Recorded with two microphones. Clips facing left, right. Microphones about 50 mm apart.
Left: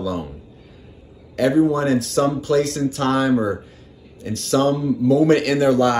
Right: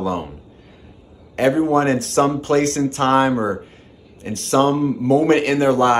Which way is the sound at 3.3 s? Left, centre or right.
Right.